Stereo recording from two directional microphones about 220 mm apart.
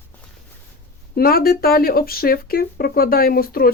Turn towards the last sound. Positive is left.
turn(degrees=40)  # may be behind; listen again after turning